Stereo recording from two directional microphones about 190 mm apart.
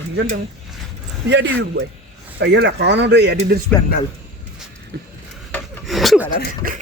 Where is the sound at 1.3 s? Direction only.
70° right (ahead or behind).